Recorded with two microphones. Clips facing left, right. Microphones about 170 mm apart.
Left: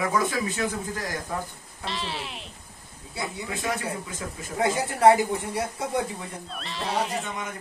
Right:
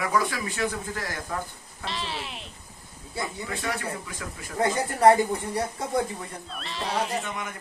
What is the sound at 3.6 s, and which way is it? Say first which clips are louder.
Speech: left 3 dB; 20° left (ahead or behind).